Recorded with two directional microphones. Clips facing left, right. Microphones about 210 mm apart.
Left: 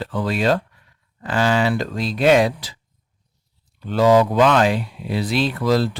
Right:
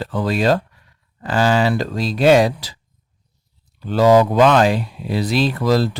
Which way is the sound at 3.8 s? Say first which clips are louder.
Right 2 dB; 40° right (ahead or behind).